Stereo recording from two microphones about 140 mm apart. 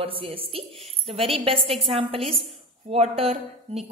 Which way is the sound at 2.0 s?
40° right (ahead or behind).